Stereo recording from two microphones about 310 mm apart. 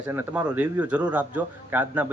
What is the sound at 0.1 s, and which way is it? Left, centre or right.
A man's voice, centre.